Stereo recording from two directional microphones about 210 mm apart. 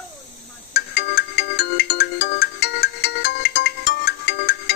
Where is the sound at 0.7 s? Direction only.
55° left (ahead or behind).